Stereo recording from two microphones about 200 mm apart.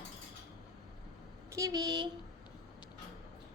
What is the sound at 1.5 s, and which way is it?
Speech, 15° right (ahead or behind).